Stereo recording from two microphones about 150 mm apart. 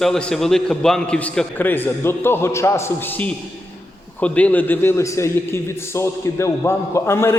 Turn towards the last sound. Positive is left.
turn(degrees=15)  # may be behind; listen again after turning